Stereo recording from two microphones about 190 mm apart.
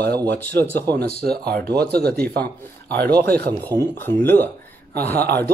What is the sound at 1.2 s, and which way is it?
Speech, 55° right (ahead or behind).